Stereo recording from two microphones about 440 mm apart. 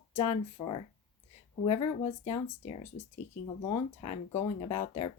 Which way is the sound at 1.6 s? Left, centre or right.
Centre.